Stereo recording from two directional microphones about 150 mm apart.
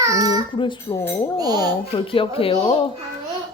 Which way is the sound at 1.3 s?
25° right (ahead or behind).